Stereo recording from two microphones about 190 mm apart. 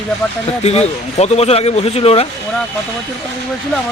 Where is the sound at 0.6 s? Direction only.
35° left (ahead or behind).